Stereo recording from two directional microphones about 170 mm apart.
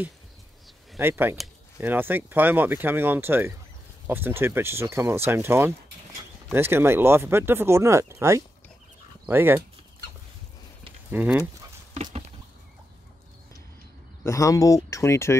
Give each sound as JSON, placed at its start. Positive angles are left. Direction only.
{"t": 0.9, "sound": "speech", "side_deg": -15}
{"t": 11.1, "sound": "speech", "side_deg": -10}
{"t": 11.9, "sound": "a sound", "side_deg": -40}
{"t": 14.2, "sound": "speech", "side_deg": 20}